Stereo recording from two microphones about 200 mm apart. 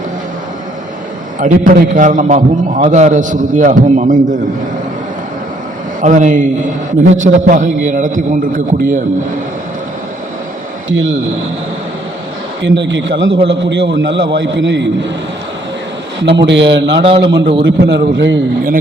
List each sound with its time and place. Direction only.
1.4 s a man's voice: 40° right (ahead or behind)
6.0 s a man's voice: 40° right (ahead or behind)
10.8 s speech: 70° right (ahead or behind)
12.6 s a man's voice: 65° right (ahead or behind)
16.2 s a man's voice: 60° right (ahead or behind)
17.0 s a man's voice: 25° right (ahead or behind)
17.7 s a man's voice: 65° right (ahead or behind)